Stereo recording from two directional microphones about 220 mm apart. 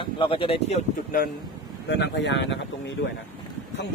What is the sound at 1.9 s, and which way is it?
Speech, 55° left (ahead or behind).